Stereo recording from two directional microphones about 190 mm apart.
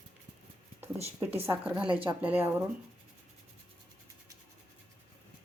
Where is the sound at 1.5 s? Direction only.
5° right (ahead or behind).